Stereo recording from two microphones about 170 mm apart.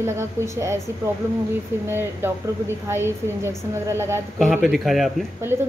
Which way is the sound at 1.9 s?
15° right (ahead or behind).